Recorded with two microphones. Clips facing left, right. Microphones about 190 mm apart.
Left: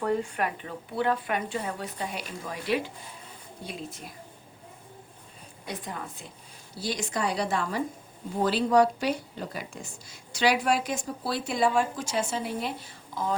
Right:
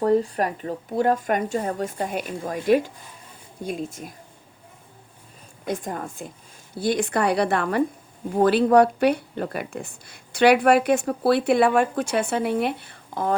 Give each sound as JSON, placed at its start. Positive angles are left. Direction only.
{"t": 0.0, "sound": "speech", "side_deg": -40}
{"t": 5.6, "sound": "speech", "side_deg": -45}